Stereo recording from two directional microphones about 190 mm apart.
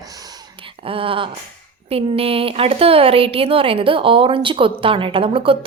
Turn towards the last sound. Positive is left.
turn(degrees=-30)  # may be behind; listen again after turning